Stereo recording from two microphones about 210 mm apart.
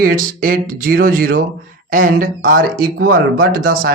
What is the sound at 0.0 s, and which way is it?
Speech, 40° right (ahead or behind).